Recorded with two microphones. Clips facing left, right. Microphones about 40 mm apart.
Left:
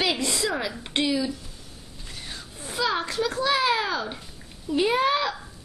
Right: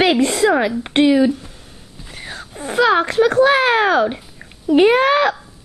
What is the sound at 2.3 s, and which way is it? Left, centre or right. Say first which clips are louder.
A child's voice: right 13 dB; right.